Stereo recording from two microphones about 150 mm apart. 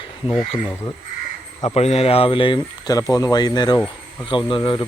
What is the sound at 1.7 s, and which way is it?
Speech, 45° left (ahead or behind).